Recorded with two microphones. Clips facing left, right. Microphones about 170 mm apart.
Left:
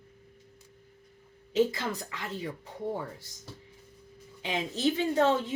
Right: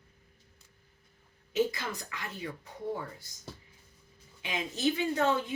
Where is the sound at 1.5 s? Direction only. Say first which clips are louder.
Left 3 dB; 30° left (ahead or behind).